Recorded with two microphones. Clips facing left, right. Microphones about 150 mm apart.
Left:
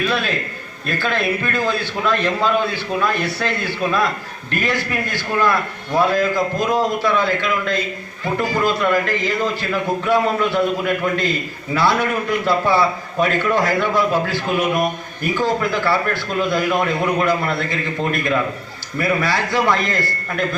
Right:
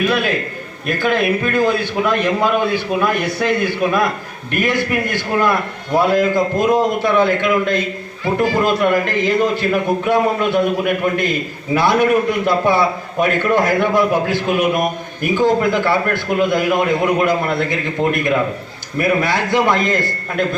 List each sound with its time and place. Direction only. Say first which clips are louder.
0.0 s a man's voice: right 4 dB; 15° right (ahead or behind)